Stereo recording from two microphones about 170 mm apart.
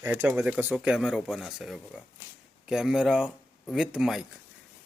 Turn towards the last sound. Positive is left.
turn(degrees=-5)  # may be behind; listen again after turning